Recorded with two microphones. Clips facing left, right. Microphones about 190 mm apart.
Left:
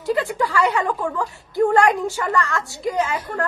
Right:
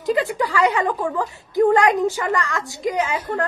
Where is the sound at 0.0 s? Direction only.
20° right (ahead or behind).